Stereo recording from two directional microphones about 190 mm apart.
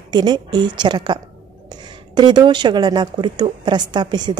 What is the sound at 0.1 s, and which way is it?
A woman's voice, 25° right (ahead or behind).